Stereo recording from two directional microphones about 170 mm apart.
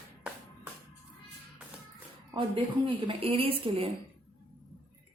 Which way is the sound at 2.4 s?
30° right (ahead or behind).